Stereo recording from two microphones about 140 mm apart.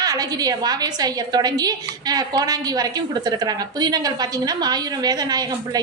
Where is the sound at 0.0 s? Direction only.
25° right (ahead or behind).